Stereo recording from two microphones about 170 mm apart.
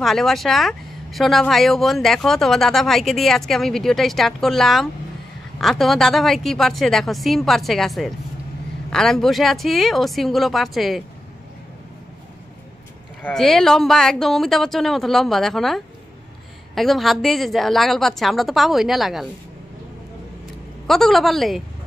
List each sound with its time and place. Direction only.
0.0 s speech: centre (ahead or behind)
13.2 s speech: 5° left (ahead or behind)
20.8 s speech: centre (ahead or behind)